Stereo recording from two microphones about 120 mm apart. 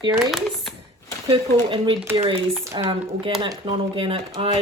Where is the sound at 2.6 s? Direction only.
25° right (ahead or behind).